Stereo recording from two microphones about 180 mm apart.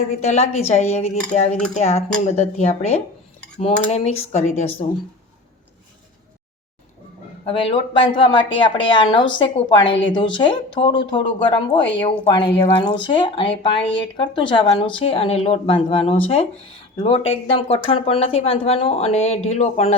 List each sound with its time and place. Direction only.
0.2 s speech: 35° left (ahead or behind)
7.4 s a woman's voice: 30° left (ahead or behind)